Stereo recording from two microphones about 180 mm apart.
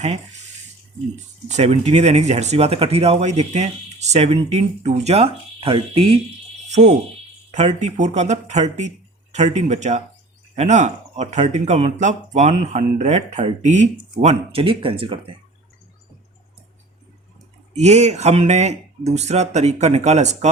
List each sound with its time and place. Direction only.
1.1 s speech: 40° right (ahead or behind)
17.7 s speech: 40° right (ahead or behind)